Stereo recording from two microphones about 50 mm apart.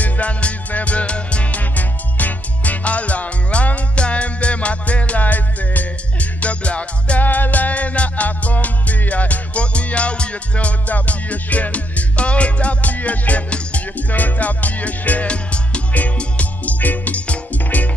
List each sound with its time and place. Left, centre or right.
0.0 s music: left